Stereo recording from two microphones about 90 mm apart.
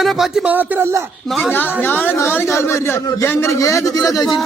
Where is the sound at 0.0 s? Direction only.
Centre (ahead or behind).